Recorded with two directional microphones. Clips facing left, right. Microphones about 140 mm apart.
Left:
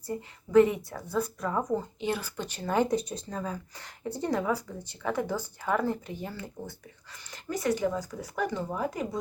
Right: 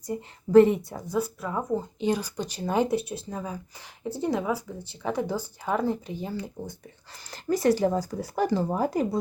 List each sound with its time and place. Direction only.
0.2 s speech: 30° right (ahead or behind); by 6.7 s 15° right (ahead or behind)
7.1 s speech: 35° right (ahead or behind)